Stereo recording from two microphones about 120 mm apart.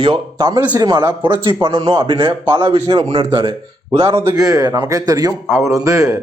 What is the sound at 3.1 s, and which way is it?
Speech, 40° right (ahead or behind).